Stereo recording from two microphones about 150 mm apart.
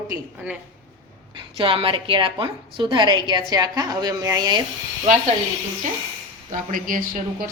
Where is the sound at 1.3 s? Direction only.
35° right (ahead or behind).